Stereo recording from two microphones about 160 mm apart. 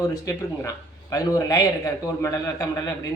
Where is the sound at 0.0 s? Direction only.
20° left (ahead or behind).